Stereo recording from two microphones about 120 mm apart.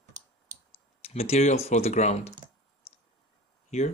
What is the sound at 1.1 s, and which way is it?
Speech, 60° left (ahead or behind).